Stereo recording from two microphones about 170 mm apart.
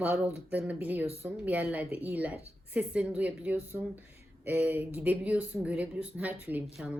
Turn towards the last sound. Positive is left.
turn(degrees=-5)  # may be behind; listen again after turning